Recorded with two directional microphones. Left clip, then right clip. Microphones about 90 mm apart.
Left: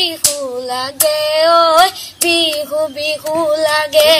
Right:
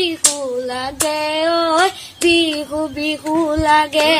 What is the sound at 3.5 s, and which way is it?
Child singing, 35° right (ahead or behind).